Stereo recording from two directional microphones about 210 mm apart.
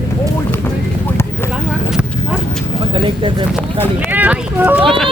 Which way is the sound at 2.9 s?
25° right (ahead or behind).